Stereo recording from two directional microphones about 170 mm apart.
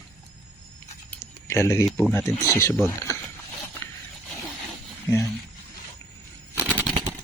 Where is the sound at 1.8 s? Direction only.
Centre (ahead or behind).